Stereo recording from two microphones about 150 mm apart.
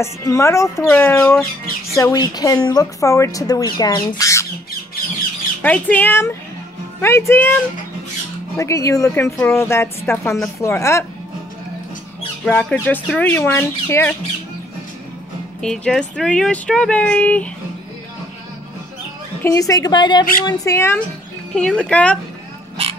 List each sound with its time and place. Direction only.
0.0 s a woman's voice: 20° left (ahead or behind)
5.6 s a woman's voice: 10° left (ahead or behind)
8.5 s a woman's voice: 20° left (ahead or behind)
12.4 s a woman's voice: 10° left (ahead or behind)
15.6 s speech: 5° left (ahead or behind)
19.4 s speech: 20° left (ahead or behind)
21.5 s a woman's voice: 5° left (ahead or behind)